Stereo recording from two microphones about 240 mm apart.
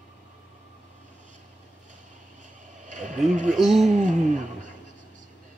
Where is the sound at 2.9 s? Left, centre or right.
Right.